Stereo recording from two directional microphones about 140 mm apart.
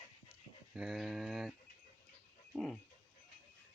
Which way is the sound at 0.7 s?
5° right (ahead or behind).